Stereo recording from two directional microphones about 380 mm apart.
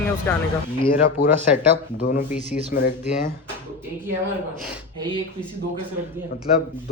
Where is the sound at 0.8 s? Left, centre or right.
Left.